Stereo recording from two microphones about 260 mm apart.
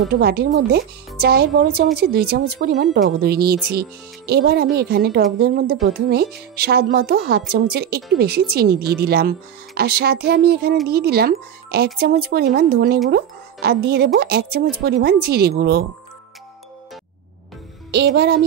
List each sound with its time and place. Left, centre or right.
0.1 s speech: right
17.9 s speech: right